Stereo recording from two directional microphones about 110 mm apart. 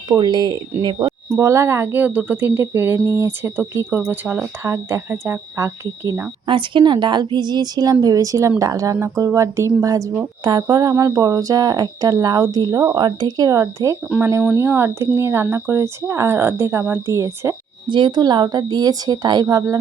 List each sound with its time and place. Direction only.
0.2 s a woman's voice: 40° right (ahead or behind)
1.0 s speech: 25° right (ahead or behind)
6.5 s a woman's voice: 50° right (ahead or behind); by 17.5 s 25° right (ahead or behind)
17.8 s speech: 45° right (ahead or behind)